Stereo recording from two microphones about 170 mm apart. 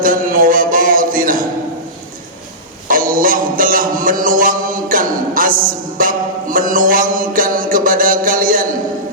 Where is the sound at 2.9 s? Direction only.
55° right (ahead or behind).